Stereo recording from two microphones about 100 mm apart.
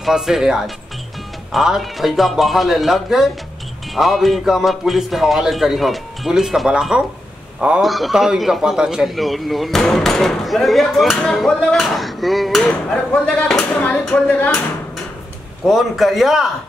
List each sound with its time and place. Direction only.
0.0 s a man's voice: 5° right (ahead or behind)
12.9 s speech: 10° left (ahead or behind)
15.6 s a man's voice: centre (ahead or behind)